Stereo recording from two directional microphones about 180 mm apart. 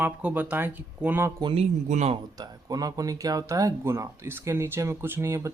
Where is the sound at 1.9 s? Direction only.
40° right (ahead or behind).